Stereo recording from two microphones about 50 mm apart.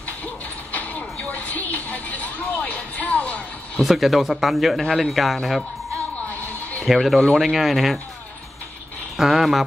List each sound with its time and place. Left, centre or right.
0.7 s mechanisms: left
1.3 s speech: left
3.8 s speech: centre
6.9 s speech: centre
9.1 s speech: centre